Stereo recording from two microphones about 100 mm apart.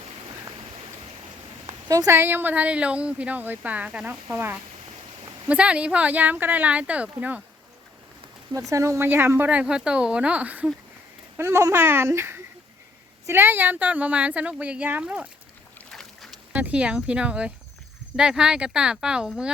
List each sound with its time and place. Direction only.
1.6 s a sound: 40° right (ahead or behind)
2.1 s a woman's voice: 20° right (ahead or behind)
8.5 s a woman's voice: 30° right (ahead or behind); by 10.7 s 15° right (ahead or behind)
11.3 s a woman's voice: 30° right (ahead or behind); by 15.3 s 10° right (ahead or behind)
15.9 s boat: 5° left (ahead or behind)
16.5 s a woman's voice: 15° right (ahead or behind)